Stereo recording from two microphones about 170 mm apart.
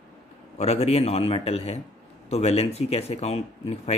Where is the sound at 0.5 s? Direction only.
40° left (ahead or behind).